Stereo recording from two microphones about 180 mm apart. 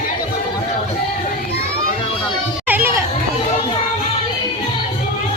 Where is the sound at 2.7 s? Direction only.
10° right (ahead or behind).